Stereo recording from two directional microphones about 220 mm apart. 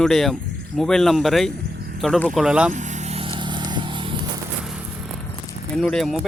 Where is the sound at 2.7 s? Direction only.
35° right (ahead or behind).